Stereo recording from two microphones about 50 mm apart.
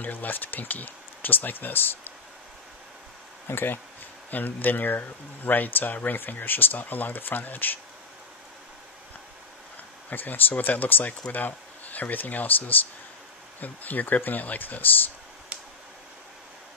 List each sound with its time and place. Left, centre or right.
0.0 s speech: left
3.4 s speech: left
10.0 s speech: left